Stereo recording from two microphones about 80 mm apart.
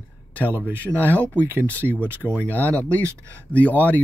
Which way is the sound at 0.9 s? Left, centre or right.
Left.